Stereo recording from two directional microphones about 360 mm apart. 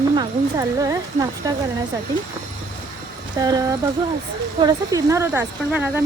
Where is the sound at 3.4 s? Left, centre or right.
Centre.